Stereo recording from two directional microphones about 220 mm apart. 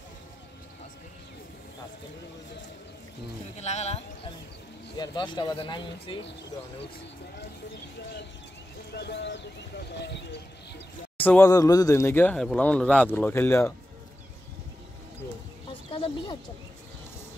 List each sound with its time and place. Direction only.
3.5 s speech: 30° left (ahead or behind)
4.9 s speech: 20° left (ahead or behind)
8.9 s speech: 50° left (ahead or behind)
11.1 s speech: 10° left (ahead or behind)
15.9 s speech: 25° left (ahead or behind)